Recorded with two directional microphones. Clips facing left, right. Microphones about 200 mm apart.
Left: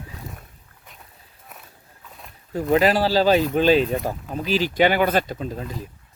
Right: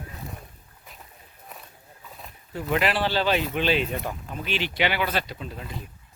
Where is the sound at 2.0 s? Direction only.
Centre (ahead or behind).